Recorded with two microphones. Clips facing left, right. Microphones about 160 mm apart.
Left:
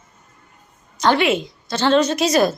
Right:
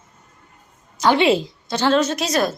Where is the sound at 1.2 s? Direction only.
30° right (ahead or behind).